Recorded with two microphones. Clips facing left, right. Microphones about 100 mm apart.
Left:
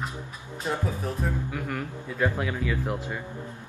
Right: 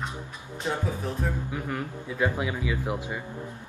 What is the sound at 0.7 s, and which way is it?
Speech, centre (ahead or behind).